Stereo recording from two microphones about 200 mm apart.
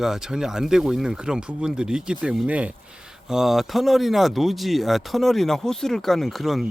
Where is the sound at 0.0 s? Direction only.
Centre (ahead or behind).